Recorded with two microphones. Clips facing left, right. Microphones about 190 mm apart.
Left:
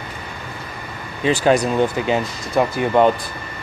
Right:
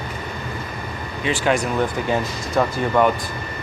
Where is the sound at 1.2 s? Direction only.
35° left (ahead or behind).